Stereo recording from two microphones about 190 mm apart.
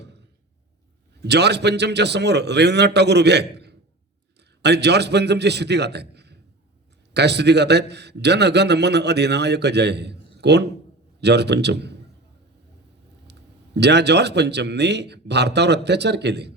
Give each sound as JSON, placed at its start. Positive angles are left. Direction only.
{"t": 1.2, "sound": "a man's voice", "side_deg": -60}
{"t": 13.3, "sound": "a sound", "side_deg": -60}
{"t": 13.7, "sound": "a man's voice", "side_deg": -60}